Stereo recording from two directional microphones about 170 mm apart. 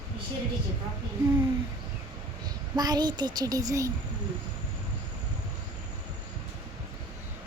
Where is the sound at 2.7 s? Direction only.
25° right (ahead or behind).